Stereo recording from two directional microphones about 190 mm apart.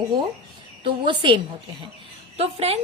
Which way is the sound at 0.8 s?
25° right (ahead or behind).